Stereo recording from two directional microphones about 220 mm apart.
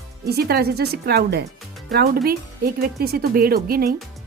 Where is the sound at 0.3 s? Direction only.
45° right (ahead or behind).